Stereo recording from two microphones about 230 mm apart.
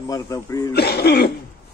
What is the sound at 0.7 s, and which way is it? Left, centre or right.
Cough, left.